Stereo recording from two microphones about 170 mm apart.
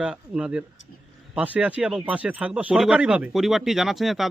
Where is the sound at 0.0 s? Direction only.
5° right (ahead or behind).